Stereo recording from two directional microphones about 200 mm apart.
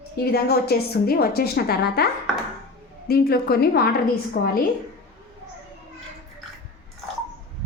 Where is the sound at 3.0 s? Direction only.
50° left (ahead or behind).